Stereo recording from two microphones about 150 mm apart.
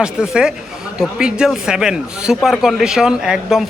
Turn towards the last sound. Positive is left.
turn(degrees=-5)  # may be behind; listen again after turning